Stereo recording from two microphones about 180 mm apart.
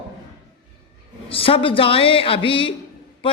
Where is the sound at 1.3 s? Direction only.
30° left (ahead or behind).